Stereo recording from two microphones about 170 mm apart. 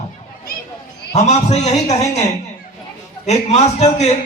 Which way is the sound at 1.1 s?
40° left (ahead or behind).